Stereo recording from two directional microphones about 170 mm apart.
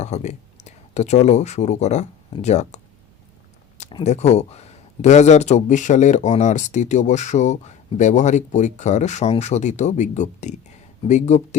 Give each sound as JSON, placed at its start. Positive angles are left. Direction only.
{"t": 0.0, "sound": "speech", "side_deg": 45}
{"t": 4.0, "sound": "speech", "side_deg": 40}